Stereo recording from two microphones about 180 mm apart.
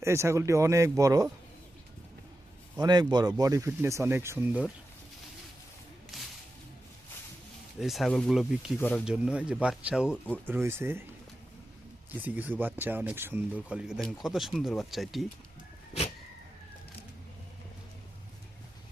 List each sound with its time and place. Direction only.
0.0 s speech: 15° right (ahead or behind)
2.8 s speech: 25° right (ahead or behind)
6.1 s whip: centre (ahead or behind)
7.8 s speech: centre (ahead or behind)
12.2 s speech: 10° right (ahead or behind)